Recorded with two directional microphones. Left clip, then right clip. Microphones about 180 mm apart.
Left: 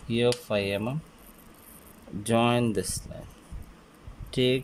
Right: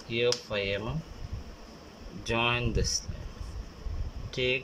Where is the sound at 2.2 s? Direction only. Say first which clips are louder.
Left 4 dB; 25° left (ahead or behind).